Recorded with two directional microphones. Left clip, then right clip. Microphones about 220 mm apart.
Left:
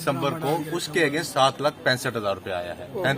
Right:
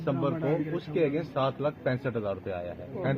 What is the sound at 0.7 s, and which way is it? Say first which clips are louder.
A man's voice: left 5 dB; 20° left (ahead or behind).